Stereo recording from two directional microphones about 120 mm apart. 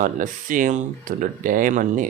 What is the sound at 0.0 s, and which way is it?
Speech, 90° right.